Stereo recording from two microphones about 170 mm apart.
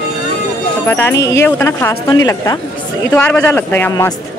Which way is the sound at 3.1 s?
10° left (ahead or behind).